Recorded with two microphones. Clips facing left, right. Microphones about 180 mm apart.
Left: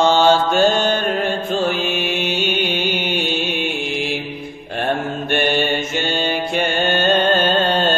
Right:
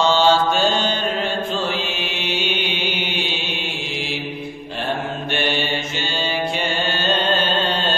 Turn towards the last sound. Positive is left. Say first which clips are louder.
# left 5 dB
turn(degrees=50)  # may be behind; listen again after turning